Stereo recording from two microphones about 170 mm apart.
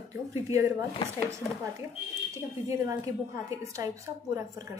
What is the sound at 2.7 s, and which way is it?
A woman's voice, 20° right (ahead or behind).